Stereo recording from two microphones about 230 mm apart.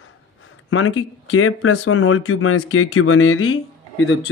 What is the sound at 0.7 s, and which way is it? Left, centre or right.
Speech, left.